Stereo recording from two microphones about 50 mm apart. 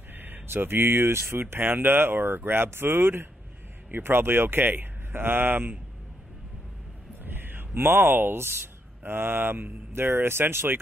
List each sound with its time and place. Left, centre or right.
0.1 s speech: right
7.2 s a sound: right
9.0 s speech: right